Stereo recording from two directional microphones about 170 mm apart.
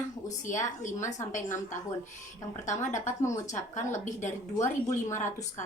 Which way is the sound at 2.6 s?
45° left (ahead or behind).